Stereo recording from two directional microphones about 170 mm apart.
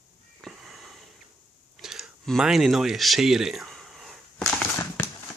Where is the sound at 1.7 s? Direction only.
5° right (ahead or behind).